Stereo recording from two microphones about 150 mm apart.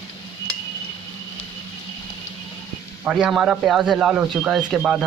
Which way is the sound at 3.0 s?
5° right (ahead or behind).